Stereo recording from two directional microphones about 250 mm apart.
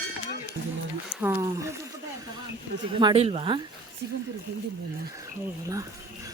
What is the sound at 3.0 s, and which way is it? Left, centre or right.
Speech, centre.